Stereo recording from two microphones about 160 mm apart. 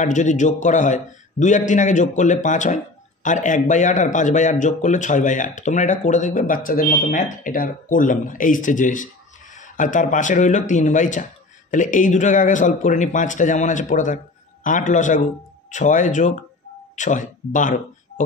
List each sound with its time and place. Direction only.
0.0 s speech: 50° left (ahead or behind)